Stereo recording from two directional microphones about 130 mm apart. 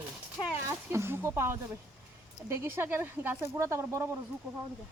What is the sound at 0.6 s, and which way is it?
Speech, 20° right (ahead or behind).